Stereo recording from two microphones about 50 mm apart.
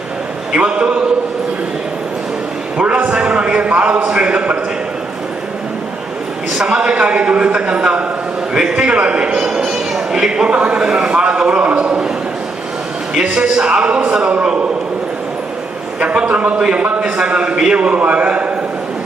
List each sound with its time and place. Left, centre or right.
0.5 s a man's voice: right
2.7 s a man's voice: right
6.7 s a man's voice: right
9.6 s a man's voice: centre; by 11.9 s right
13.1 s a man's voice: right
16.0 s a man's voice: right